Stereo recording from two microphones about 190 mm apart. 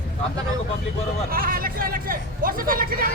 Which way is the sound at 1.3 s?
50° right (ahead or behind).